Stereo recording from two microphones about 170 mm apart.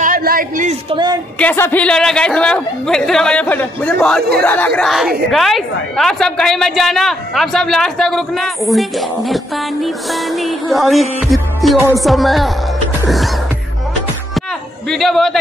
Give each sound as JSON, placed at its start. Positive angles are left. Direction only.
{"t": 0.0, "sound": "a sound", "side_deg": -55}
{"t": 0.8, "sound": "speech", "side_deg": -25}
{"t": 1.4, "sound": "a woman's voice", "side_deg": 10}
{"t": 14.9, "sound": "a woman's voice", "side_deg": 0}